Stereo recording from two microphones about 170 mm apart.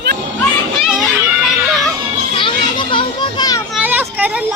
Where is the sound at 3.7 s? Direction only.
10° right (ahead or behind).